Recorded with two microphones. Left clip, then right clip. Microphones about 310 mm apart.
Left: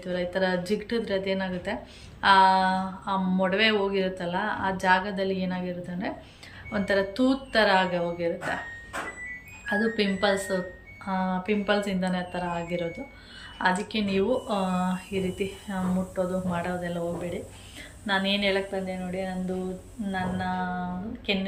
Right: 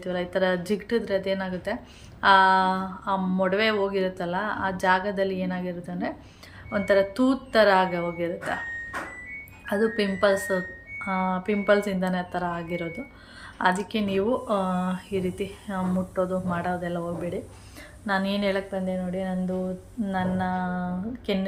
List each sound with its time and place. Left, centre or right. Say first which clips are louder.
0.0 s speech: right 2 dB; centre
9.6 s a woman's voice: right 1 dB; centre